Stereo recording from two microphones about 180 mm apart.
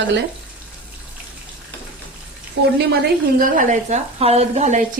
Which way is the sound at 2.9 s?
55° right (ahead or behind).